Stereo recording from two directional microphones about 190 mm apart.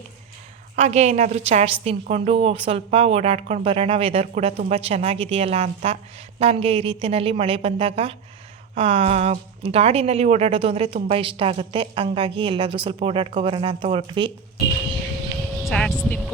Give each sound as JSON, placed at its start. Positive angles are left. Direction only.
{"t": 0.8, "sound": "a woman's voice", "side_deg": -35}
{"t": 15.5, "sound": "vehicle", "side_deg": 5}
{"t": 16.0, "sound": "speech", "side_deg": 10}